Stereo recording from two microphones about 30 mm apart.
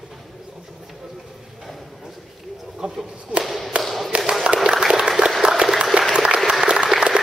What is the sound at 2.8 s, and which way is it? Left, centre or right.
Whip, right.